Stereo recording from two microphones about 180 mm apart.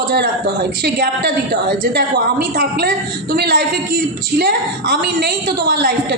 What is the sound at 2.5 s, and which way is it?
A woman's voice, 60° right (ahead or behind).